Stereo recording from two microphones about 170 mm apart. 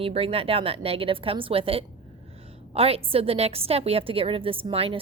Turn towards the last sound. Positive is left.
turn(degrees=-35)  # may be behind; listen again after turning